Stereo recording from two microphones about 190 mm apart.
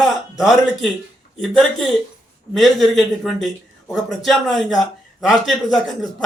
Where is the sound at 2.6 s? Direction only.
Centre (ahead or behind).